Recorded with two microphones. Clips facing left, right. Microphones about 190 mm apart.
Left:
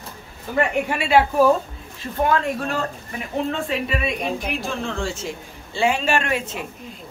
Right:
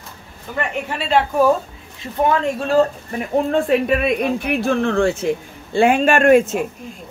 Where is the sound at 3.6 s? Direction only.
55° right (ahead or behind).